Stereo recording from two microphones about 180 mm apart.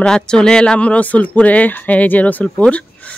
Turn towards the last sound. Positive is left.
turn(degrees=5)  # may be behind; listen again after turning